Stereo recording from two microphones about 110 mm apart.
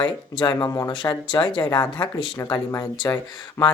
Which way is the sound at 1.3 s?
50° left (ahead or behind).